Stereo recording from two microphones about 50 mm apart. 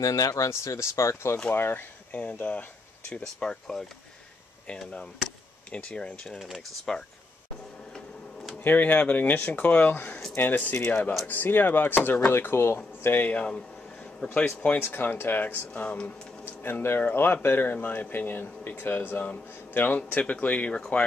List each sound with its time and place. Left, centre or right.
0.1 s speech: left
1.5 s speech: left
2.1 s speech: left
3.3 s speech: centre
5.7 s speech: left
6.2 s speech: centre
6.9 s speech: centre
8.6 s speech: left
10.3 s speech: left
13.3 s speech: left
14.8 s speech: left
16.4 s speech: left
20.0 s speech: left